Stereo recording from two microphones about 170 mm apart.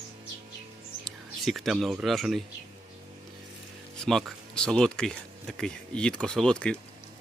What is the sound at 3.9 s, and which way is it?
Speech, centre (ahead or behind).